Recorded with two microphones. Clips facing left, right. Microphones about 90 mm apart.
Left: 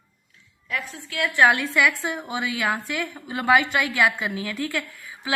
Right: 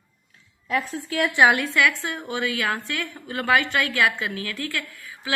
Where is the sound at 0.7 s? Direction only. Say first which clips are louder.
Right 5 dB; 40° right (ahead or behind).